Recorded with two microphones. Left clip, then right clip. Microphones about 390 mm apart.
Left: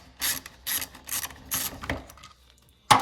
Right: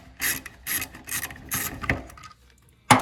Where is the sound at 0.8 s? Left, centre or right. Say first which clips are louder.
Right 2 dB; centre.